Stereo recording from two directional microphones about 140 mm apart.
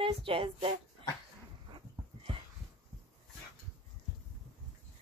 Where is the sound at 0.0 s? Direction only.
40° right (ahead or behind).